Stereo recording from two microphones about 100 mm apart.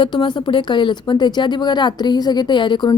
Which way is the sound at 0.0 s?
60° left (ahead or behind).